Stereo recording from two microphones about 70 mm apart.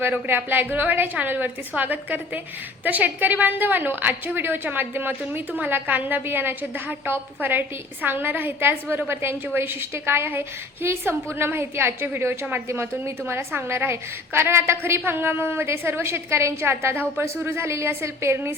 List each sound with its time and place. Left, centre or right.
0.3 s a woman's voice: right